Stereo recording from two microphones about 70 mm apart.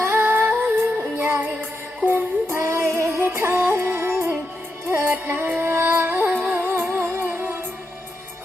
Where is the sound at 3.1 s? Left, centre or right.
Right.